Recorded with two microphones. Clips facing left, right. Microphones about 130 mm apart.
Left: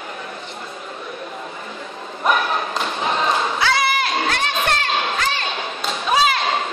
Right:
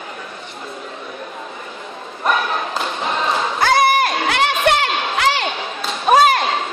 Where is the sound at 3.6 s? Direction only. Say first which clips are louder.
Right 5 dB; 45° right (ahead or behind); by 5.4 s 70° right (ahead or behind).